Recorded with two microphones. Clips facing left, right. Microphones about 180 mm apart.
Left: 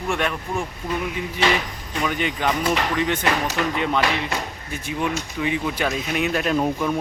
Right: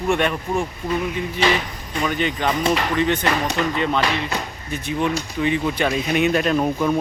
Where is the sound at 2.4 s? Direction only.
10° left (ahead or behind).